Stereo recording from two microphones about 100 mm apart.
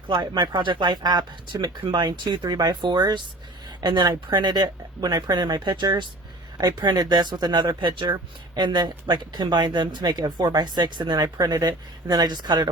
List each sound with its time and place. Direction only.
0.1 s speech: 45° right (ahead or behind)